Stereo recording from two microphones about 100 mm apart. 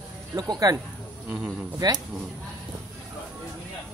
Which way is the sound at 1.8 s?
40° right (ahead or behind).